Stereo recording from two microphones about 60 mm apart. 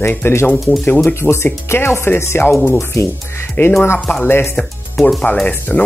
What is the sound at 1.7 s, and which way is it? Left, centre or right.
Speech, left.